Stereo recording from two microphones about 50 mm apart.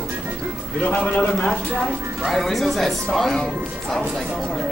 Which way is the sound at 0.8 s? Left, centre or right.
Left.